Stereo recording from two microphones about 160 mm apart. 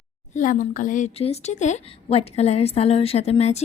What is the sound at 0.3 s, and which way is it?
A woman's voice, 50° left (ahead or behind).